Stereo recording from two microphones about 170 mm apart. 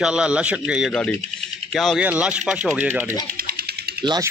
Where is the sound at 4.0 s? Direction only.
25° right (ahead or behind).